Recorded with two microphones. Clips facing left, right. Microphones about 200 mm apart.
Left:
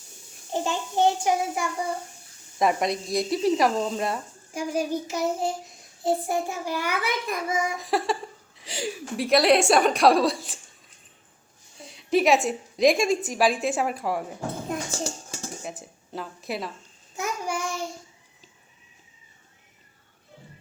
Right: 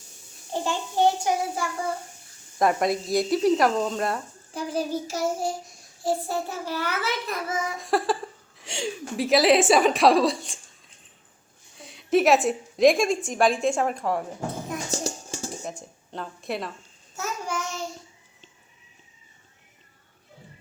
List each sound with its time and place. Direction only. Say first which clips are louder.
0.5 s a child's voice: even; 20° left (ahead or behind)
2.6 s speech: right 1 dB; centre (ahead or behind)
4.5 s a child's voice: left 1 dB; 10° left (ahead or behind)
7.8 s speech: right 1 dB; centre (ahead or behind)
11.8 s a woman's voice: right 1 dB; centre (ahead or behind)
15.6 s speech: right 1 dB; 5° left (ahead or behind)
17.2 s child singing: left 1 dB; 15° left (ahead or behind)